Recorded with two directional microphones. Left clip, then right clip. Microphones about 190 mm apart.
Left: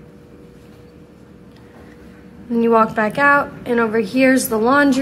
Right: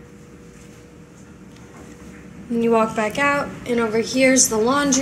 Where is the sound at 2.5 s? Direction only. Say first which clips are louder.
Left 4 dB; 15° left (ahead or behind).